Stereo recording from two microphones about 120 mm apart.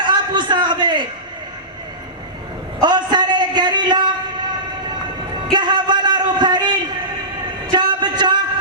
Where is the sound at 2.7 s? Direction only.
40° right (ahead or behind).